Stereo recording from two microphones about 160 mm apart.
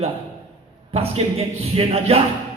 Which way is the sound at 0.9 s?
40° right (ahead or behind).